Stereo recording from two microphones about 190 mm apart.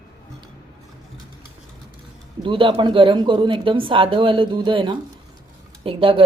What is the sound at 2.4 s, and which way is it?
Speech, 25° right (ahead or behind).